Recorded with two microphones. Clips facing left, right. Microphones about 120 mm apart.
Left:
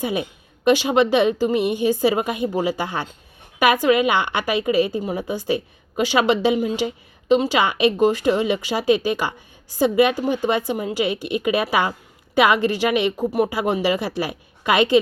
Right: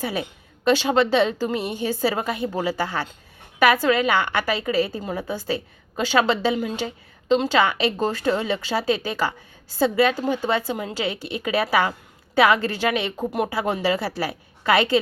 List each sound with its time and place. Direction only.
0.0 s a woman's voice: 20° left (ahead or behind)